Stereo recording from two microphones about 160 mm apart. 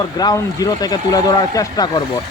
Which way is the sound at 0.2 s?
25° left (ahead or behind).